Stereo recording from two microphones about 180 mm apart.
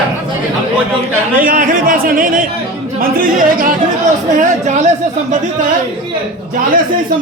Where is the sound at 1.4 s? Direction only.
50° right (ahead or behind).